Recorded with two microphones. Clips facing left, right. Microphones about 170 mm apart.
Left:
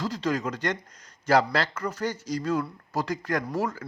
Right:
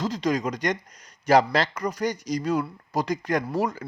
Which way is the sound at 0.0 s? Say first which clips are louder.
Right 3 dB; 20° right (ahead or behind).